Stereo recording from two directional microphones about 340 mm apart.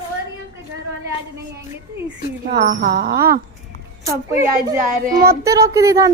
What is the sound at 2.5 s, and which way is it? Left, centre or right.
Speech, right.